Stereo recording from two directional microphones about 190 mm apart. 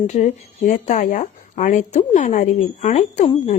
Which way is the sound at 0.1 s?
40° left (ahead or behind).